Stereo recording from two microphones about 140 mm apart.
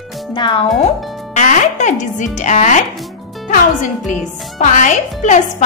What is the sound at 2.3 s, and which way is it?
Speech, 55° left (ahead or behind).